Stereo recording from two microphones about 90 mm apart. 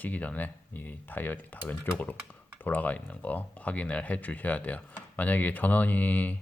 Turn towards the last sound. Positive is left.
turn(degrees=20)  # may be behind; listen again after turning